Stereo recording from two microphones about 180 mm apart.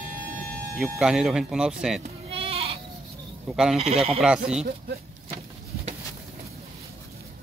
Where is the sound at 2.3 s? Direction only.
30° right (ahead or behind).